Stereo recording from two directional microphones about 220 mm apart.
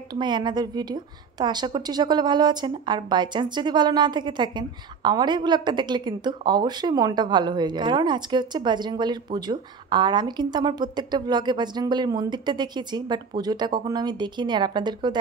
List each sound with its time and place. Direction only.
0.1 s a woman's voice: 20° right (ahead or behind)